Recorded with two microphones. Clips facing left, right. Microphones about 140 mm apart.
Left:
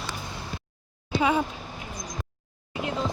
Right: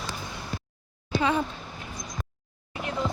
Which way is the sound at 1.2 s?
15° left (ahead or behind).